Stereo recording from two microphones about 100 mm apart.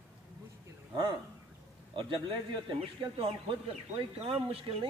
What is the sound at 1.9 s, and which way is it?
Speech, 55° right (ahead or behind).